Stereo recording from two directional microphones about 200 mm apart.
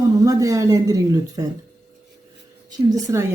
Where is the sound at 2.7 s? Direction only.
15° right (ahead or behind).